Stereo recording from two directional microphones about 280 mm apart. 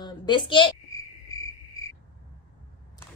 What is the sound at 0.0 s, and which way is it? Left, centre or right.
Cricket, centre.